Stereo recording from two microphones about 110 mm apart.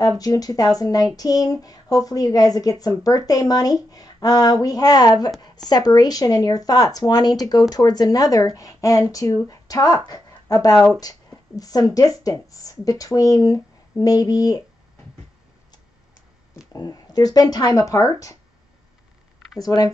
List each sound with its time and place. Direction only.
0.2 s speech: 35° left (ahead or behind)
16.7 s speech: 35° left (ahead or behind)
19.6 s speech: 35° left (ahead or behind)